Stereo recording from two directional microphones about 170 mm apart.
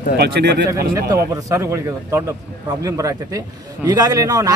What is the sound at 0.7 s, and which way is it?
A man's voice, 20° right (ahead or behind).